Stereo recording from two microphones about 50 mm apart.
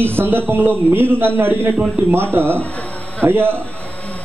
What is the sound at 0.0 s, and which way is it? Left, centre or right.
A man's voice, right.